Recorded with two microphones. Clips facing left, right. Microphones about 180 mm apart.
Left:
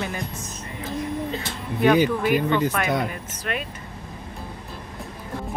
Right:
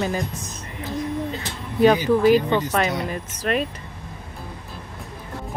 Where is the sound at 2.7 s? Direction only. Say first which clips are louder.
Right 1 dB; 30° right (ahead or behind).